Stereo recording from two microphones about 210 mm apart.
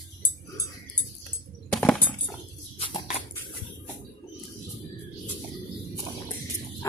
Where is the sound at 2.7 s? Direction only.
25° left (ahead or behind).